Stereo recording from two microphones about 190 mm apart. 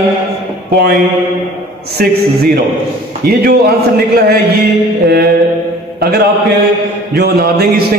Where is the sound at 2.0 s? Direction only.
50° right (ahead or behind).